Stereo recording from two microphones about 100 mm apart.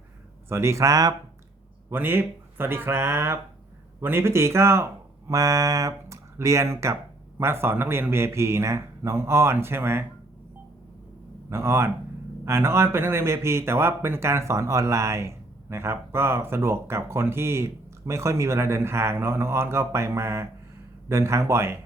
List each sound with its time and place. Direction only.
0.4 s speech: 25° right (ahead or behind)
1.9 s speech: 20° right (ahead or behind)
11.4 s speech: 25° right (ahead or behind)